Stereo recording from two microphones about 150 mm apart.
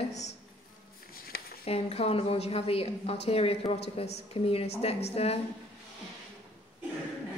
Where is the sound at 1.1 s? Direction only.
80° left.